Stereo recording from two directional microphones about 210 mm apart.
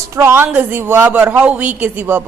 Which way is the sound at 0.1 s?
10° right (ahead or behind).